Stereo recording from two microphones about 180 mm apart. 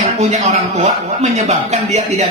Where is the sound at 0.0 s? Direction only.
40° right (ahead or behind).